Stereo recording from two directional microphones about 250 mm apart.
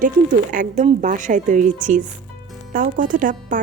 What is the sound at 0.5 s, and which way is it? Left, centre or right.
A woman's voice, right.